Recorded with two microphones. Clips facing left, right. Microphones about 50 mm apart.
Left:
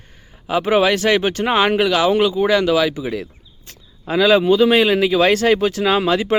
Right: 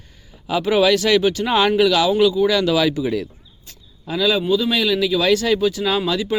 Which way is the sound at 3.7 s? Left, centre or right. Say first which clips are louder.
Left 4 dB; left.